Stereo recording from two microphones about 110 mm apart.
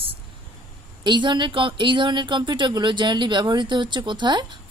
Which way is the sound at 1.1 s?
45° right (ahead or behind).